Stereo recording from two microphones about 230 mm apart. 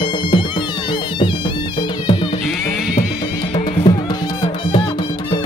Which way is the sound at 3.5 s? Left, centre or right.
Centre.